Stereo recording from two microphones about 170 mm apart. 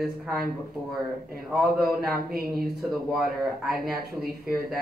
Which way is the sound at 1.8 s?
65° right (ahead or behind).